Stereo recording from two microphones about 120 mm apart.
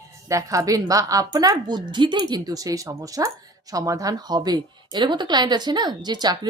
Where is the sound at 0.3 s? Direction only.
25° right (ahead or behind).